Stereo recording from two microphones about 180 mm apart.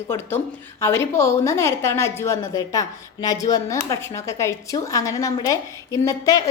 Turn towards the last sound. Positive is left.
turn(degrees=20)  # may be behind; listen again after turning